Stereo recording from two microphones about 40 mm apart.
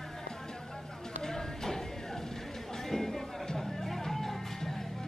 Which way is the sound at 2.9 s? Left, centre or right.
Centre.